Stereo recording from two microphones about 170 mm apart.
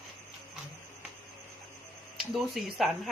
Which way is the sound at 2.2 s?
Centre (ahead or behind).